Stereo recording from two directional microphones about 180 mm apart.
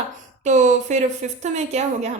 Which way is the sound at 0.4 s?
40° right (ahead or behind).